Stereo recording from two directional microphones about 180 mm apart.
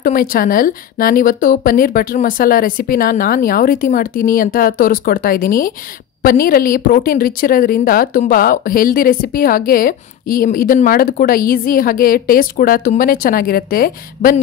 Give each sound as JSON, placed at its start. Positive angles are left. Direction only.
{"t": 0.0, "sound": "speech", "side_deg": 50}